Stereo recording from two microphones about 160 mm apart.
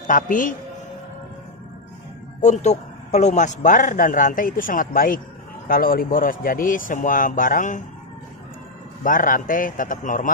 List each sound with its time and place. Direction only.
0.0 s a man's voice: 55° left (ahead or behind)
2.4 s a man's voice: 45° left (ahead or behind)
9.0 s a man's voice: 55° left (ahead or behind)